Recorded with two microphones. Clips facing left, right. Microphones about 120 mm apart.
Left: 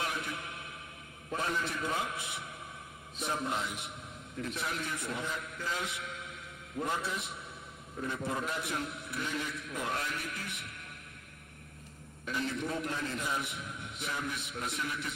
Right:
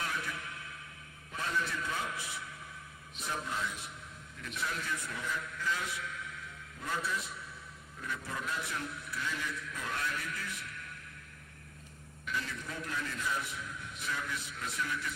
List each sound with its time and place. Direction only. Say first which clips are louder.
0.0 s a sound: left 2 dB; 20° left (ahead or behind)
1.4 s a man's voice: left 1 dB; 20° left (ahead or behind)
12.2 s a man's voice: left 5 dB; 25° left (ahead or behind)